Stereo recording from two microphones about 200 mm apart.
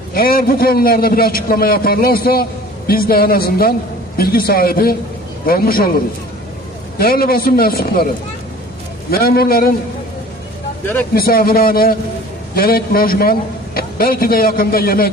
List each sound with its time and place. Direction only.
0.1 s a man's voice: 50° left (ahead or behind)
7.0 s a man's voice: 50° left (ahead or behind)
9.0 s a man's voice: 50° left (ahead or behind)
11.1 s a man's voice: 50° left (ahead or behind)